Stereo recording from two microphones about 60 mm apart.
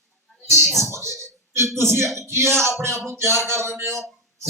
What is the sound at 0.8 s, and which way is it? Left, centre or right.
Speech, right.